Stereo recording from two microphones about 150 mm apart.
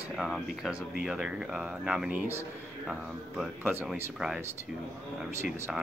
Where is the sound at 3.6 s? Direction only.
10° right (ahead or behind).